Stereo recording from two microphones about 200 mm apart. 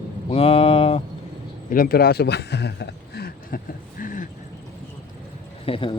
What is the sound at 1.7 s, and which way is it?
Speech, 50° left (ahead or behind).